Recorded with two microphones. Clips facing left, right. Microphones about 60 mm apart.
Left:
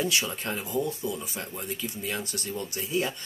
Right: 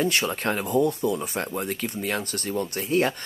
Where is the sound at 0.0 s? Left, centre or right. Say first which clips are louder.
Right 5 dB; right.